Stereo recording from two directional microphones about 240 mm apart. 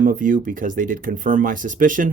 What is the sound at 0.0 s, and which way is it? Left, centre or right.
Speech, right.